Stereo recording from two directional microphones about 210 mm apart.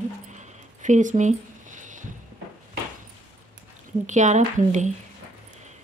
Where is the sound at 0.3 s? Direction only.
35° right (ahead or behind).